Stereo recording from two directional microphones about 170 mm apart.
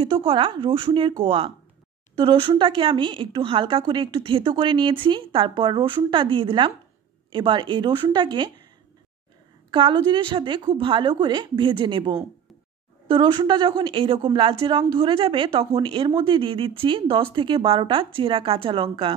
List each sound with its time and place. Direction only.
0.0 s a woman's voice: 30° right (ahead or behind)
9.7 s a woman's voice: 30° right (ahead or behind)